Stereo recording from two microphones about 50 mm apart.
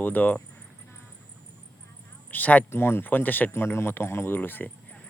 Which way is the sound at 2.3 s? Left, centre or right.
Left.